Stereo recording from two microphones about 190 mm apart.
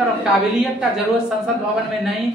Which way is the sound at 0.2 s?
5° right (ahead or behind).